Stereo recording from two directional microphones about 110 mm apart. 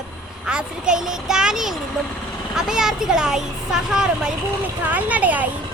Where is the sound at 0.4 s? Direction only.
10° right (ahead or behind).